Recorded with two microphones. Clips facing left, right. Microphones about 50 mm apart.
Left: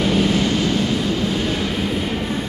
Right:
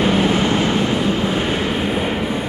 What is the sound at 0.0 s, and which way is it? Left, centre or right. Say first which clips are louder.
Vehicle: right 2 dB; right.